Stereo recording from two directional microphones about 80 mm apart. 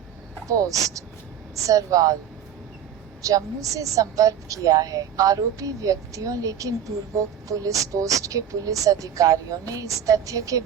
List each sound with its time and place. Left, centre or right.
0.4 s a woman's voice: right
3.2 s a woman's voice: right